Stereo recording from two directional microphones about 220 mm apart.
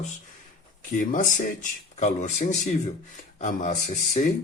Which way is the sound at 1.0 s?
35° left (ahead or behind).